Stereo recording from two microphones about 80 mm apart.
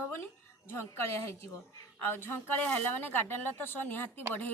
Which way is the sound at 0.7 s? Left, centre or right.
Left.